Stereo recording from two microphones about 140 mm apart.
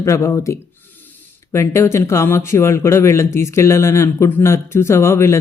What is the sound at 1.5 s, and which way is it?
Speech, 20° left (ahead or behind).